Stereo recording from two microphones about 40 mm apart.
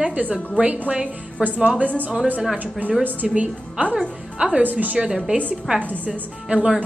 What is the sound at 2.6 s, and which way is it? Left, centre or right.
Speech, right.